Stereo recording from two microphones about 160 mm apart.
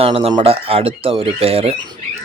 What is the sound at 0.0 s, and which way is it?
Speech, 40° right (ahead or behind).